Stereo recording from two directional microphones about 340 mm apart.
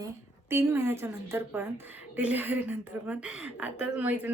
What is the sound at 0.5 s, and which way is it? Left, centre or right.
A woman's voice, centre.